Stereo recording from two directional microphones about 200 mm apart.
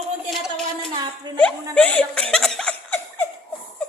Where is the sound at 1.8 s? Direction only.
5° left (ahead or behind).